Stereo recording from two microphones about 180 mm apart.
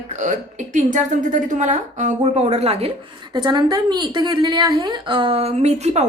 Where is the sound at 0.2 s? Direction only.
45° right (ahead or behind).